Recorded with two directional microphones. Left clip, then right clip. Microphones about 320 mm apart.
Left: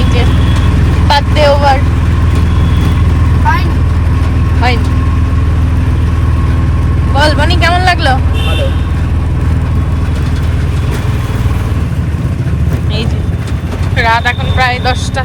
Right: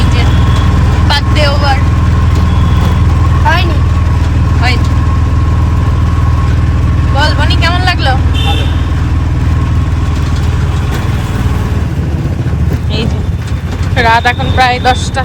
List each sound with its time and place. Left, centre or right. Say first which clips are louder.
1.0 s vehicle: left 4 dB; centre
7.2 s vehicle: left 2 dB; left
14.0 s speech: right 2 dB; centre